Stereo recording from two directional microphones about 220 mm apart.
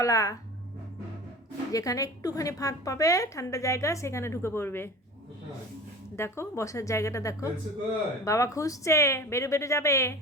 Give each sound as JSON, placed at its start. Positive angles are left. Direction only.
{"t": 0.0, "sound": "a woman's voice", "side_deg": 15}
{"t": 1.7, "sound": "a woman's voice", "side_deg": 15}
{"t": 6.1, "sound": "a woman's voice", "side_deg": 10}